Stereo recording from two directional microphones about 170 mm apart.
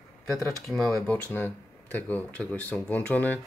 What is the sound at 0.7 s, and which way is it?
Speech, centre (ahead or behind).